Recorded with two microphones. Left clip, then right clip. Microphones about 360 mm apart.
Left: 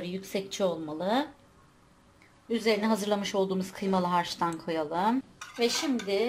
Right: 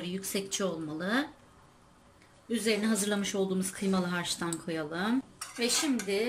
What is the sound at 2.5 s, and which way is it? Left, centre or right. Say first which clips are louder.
Speech: left 3 dB; centre.